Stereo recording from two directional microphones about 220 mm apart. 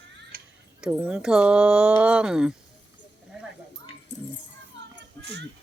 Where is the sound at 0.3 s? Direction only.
40° right (ahead or behind).